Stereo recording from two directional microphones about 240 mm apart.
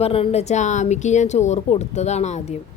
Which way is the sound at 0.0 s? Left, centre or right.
Left.